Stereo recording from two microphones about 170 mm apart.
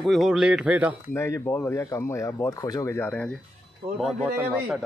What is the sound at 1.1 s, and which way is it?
Speech, 15° left (ahead or behind).